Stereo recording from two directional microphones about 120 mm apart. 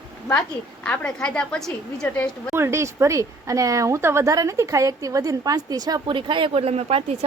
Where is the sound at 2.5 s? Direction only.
20° right (ahead or behind).